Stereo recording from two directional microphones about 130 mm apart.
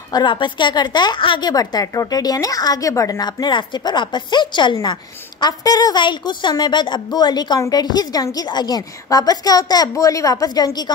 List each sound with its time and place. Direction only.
0.1 s a woman's voice: 35° left (ahead or behind)